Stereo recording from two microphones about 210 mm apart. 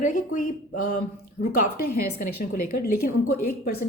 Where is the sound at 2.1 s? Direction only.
45° left (ahead or behind).